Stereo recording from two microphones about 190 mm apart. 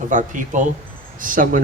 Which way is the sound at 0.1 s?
40° right (ahead or behind).